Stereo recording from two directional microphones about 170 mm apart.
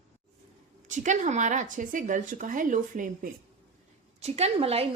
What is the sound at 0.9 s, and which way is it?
A woman's voice, 45° right (ahead or behind).